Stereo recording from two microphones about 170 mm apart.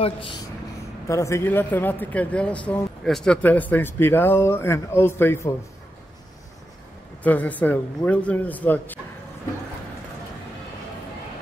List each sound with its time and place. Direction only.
0.0 s speech: 30° left (ahead or behind)
1.0 s a man's voice: 15° left (ahead or behind)
7.2 s a man's voice: 10° left (ahead or behind)